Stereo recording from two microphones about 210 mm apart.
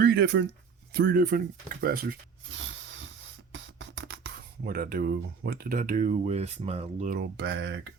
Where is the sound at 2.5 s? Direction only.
65° right (ahead or behind).